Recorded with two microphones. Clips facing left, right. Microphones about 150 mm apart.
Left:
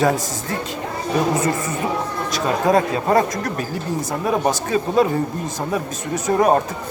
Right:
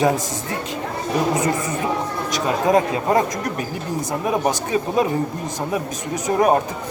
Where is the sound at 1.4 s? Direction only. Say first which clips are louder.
Even; 20° right (ahead or behind).